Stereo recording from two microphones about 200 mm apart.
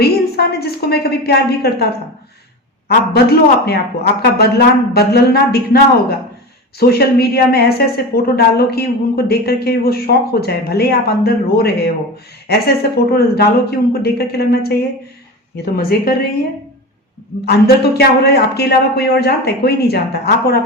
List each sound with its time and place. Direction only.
0.0 s a woman's voice: 50° left (ahead or behind)
2.9 s a woman's voice: 50° left (ahead or behind)
17.4 s a woman's voice: 55° left (ahead or behind)